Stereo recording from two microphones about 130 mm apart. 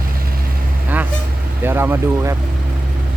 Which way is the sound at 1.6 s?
20° right (ahead or behind).